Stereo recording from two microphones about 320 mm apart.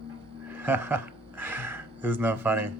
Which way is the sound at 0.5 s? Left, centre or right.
Centre.